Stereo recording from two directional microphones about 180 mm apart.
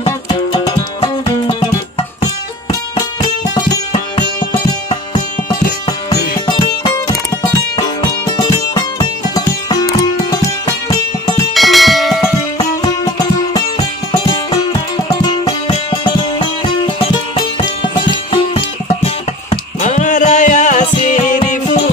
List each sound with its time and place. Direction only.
0.0 s music: 30° left (ahead or behind)
6.4 s music: 25° left (ahead or behind)
11.5 s bell: centre (ahead or behind)
12.5 s music: 20° left (ahead or behind); by 21.4 s 45° left (ahead or behind)